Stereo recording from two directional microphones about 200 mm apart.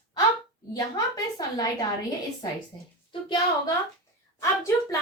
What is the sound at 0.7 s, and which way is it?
A woman's voice, 20° left (ahead or behind).